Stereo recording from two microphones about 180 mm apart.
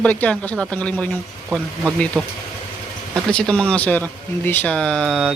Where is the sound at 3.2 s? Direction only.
5° left (ahead or behind).